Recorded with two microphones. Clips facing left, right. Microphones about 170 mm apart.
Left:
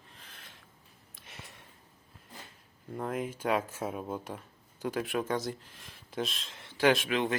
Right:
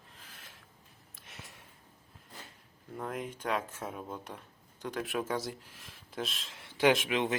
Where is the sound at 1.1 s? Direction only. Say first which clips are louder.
Left 1 dB; centre (ahead or behind).